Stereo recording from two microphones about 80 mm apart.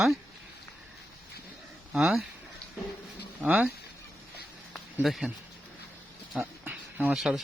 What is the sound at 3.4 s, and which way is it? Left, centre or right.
Speech, centre.